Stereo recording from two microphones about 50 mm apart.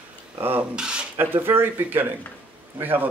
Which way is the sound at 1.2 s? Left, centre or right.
Right.